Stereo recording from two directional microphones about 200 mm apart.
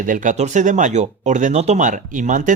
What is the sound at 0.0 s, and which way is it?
Speech, 40° right (ahead or behind).